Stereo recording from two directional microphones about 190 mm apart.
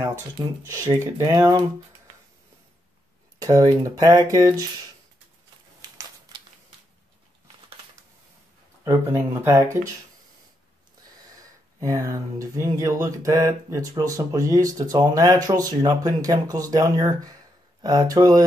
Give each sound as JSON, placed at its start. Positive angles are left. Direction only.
{"t": 0.0, "sound": "speech", "side_deg": -15}
{"t": 3.3, "sound": "speech", "side_deg": -20}
{"t": 5.8, "sound": "a sound", "side_deg": -20}
{"t": 8.8, "sound": "speech", "side_deg": -15}
{"t": 11.3, "sound": "speech", "side_deg": -15}